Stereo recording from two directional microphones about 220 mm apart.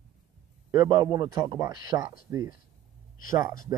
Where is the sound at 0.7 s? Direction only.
15° right (ahead or behind).